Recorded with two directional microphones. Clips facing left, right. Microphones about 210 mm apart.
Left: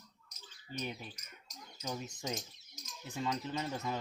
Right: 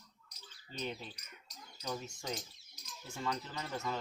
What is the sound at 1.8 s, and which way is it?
Cricket, 20° left (ahead or behind).